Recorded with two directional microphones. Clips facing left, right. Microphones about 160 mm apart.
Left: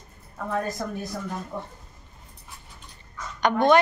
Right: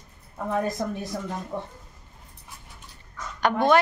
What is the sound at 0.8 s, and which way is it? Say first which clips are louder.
Speech: right 2 dB; 20° right (ahead or behind).